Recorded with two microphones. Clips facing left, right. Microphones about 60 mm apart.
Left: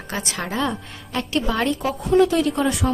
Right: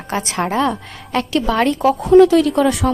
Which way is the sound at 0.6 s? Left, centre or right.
Right.